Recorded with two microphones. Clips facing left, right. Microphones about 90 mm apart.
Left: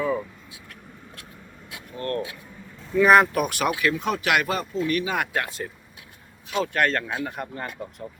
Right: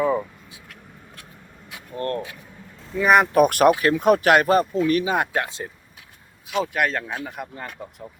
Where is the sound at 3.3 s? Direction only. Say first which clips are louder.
Right 9 dB; 50° right (ahead or behind); by 5.6 s 25° right (ahead or behind).